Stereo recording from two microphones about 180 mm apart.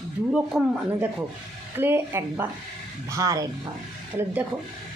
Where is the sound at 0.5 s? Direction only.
Centre (ahead or behind).